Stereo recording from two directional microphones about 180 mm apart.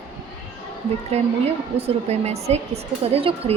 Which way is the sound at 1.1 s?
35° right (ahead or behind).